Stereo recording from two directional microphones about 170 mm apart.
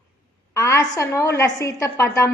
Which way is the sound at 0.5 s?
15° left (ahead or behind).